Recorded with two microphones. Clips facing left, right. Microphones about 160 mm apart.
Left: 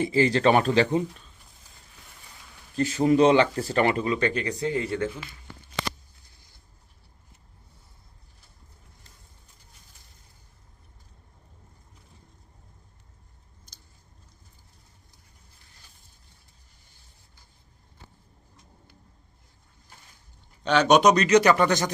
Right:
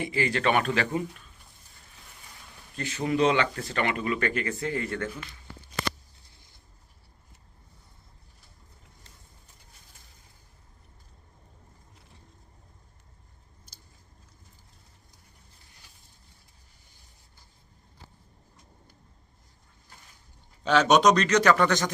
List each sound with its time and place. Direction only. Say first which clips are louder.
0.0 s speech: left 6 dB; 35° left (ahead or behind)
2.7 s speech: left 7 dB; 35° left (ahead or behind); by 5.1 s 20° left (ahead or behind)
20.7 s speech: left 2 dB; centre (ahead or behind)
21.1 s speech: left 3 dB; 10° left (ahead or behind)